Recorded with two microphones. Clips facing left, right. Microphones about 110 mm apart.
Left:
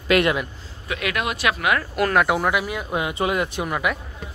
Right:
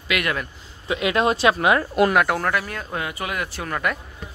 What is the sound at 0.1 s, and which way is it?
Speech, 35° left (ahead or behind).